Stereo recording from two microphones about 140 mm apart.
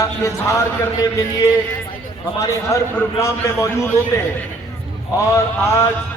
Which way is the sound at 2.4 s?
20° left (ahead or behind).